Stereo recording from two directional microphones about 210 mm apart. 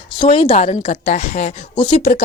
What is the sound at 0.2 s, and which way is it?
Speech, 25° left (ahead or behind).